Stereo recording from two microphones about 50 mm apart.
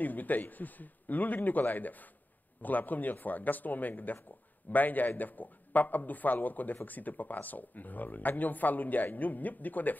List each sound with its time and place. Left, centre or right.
0.0 s a man's voice: left